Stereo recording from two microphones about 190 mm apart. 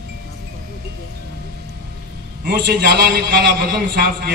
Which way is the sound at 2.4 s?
60° right (ahead or behind).